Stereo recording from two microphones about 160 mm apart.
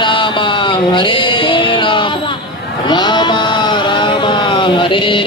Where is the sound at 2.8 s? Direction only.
30° left (ahead or behind).